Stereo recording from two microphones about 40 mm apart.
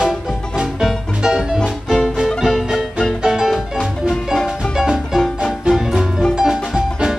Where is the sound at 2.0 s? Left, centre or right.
Centre.